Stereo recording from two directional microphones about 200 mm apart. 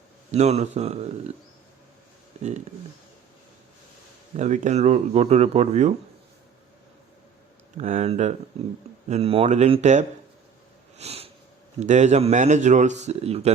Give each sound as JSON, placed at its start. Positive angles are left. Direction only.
{"t": 0.3, "sound": "speech", "side_deg": -35}
{"t": 4.4, "sound": "speech", "side_deg": -35}
{"t": 7.8, "sound": "speech", "side_deg": -35}
{"t": 10.9, "sound": "sniff", "side_deg": -30}
{"t": 11.8, "sound": "speech", "side_deg": -35}